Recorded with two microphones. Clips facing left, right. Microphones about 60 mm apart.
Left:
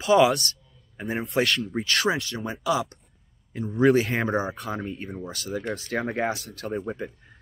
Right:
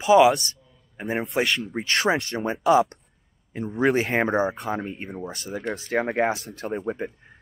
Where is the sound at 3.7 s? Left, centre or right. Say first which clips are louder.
Left 1 dB; right.